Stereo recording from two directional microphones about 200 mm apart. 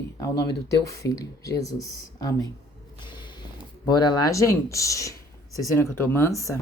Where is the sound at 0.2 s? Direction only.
15° left (ahead or behind).